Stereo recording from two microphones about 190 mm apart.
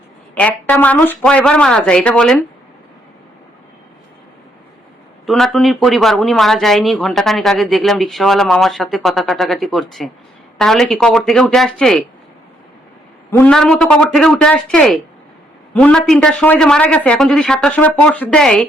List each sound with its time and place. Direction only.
0.3 s speech: 10° left (ahead or behind)
5.2 s speech: centre (ahead or behind)
13.3 s speech: 5° left (ahead or behind)